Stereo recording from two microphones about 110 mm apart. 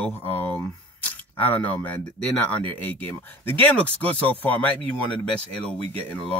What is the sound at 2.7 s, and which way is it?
Speech, 15° left (ahead or behind).